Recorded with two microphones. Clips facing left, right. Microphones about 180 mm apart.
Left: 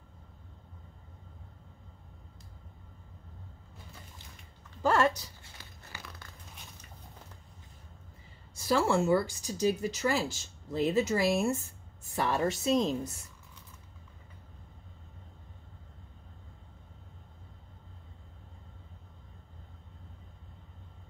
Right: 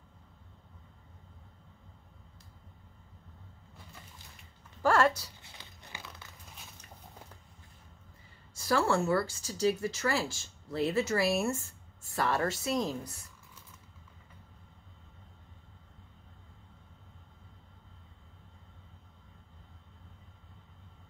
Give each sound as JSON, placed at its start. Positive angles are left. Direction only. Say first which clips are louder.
{"t": 4.8, "sound": "speech", "louder": "even", "side_deg": 20}
{"t": 5.4, "sound": "a sound", "louder": "even", "side_deg": -20}
{"t": 8.5, "sound": "speech", "louder": "left 1 dB", "side_deg": 15}